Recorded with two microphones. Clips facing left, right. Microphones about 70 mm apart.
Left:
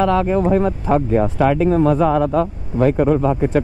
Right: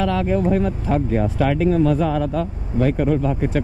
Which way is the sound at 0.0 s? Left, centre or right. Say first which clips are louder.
Left 4 dB; left.